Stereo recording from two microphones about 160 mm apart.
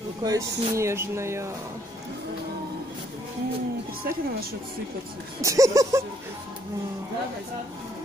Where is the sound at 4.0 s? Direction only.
70° right (ahead or behind).